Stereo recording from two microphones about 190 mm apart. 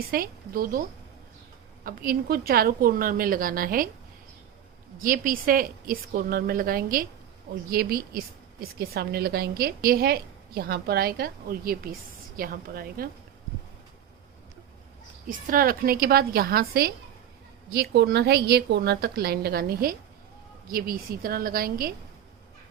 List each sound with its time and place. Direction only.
0.1 s a woman's voice: 50° right (ahead or behind)
1.8 s a woman's voice: 50° right (ahead or behind)
4.9 s a woman's voice: 45° right (ahead or behind)
15.3 s a woman's voice: 45° right (ahead or behind)